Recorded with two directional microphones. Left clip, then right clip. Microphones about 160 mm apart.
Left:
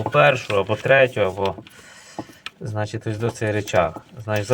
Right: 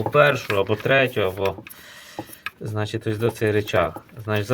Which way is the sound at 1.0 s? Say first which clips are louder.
Left 3 dB; 20° right (ahead or behind).